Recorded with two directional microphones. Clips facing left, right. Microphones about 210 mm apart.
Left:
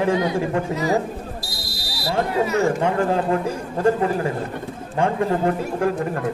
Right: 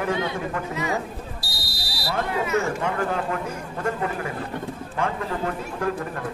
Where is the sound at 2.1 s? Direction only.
35° left (ahead or behind).